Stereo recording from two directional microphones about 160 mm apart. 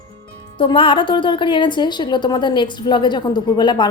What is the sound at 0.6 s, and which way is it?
A woman's voice, 30° left (ahead or behind).